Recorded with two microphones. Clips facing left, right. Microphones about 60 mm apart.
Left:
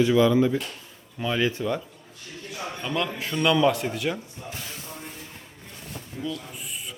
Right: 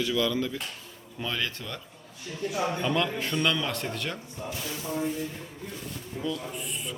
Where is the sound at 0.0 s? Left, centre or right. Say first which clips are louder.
Left 8 dB; left.